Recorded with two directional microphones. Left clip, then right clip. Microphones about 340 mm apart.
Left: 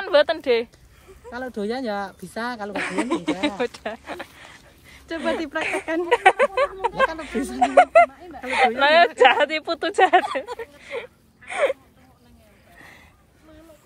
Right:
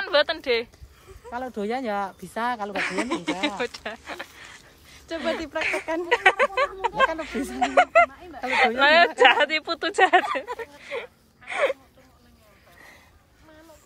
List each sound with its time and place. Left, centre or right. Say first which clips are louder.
0.0 s speech: left 4 dB; centre
4.6 s a sound: left 1 dB; centre
5.6 s speech: left 2 dB; centre